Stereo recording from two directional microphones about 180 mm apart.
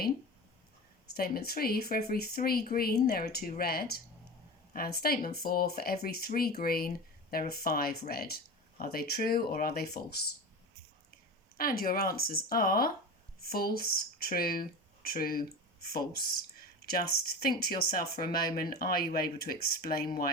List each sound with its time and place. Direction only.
1.1 s speech: 55° left (ahead or behind)
11.5 s speech: 55° left (ahead or behind)